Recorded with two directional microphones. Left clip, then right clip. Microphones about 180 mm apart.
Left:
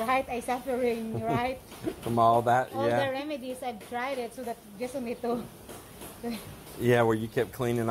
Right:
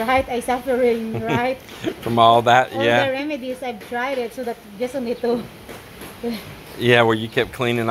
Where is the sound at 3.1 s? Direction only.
55° right (ahead or behind).